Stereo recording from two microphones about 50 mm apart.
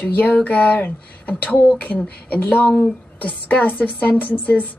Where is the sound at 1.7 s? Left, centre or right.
Left.